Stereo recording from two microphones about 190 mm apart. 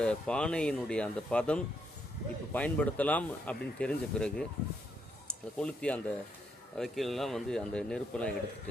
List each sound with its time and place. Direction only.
0.0 s a man's voice: 5° left (ahead or behind)